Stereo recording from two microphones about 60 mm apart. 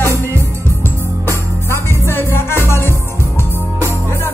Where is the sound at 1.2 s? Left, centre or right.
Left.